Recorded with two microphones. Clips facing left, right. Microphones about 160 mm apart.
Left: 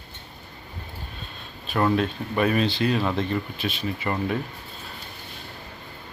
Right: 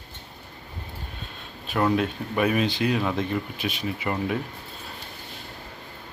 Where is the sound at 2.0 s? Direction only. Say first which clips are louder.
Left 1 dB; 10° right (ahead or behind).